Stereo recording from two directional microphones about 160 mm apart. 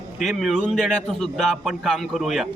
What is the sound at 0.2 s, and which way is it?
A man's voice, centre (ahead or behind).